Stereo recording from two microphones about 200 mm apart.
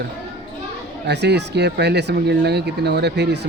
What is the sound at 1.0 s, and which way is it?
A man's voice, 55° right (ahead or behind).